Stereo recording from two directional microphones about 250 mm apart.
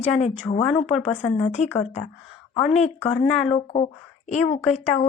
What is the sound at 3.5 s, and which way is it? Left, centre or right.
Speech, left.